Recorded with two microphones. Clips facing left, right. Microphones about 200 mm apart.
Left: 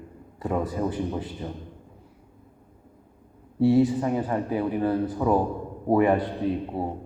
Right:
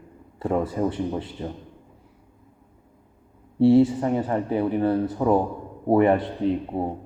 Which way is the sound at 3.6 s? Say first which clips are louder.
Right 3 dB; 30° right (ahead or behind).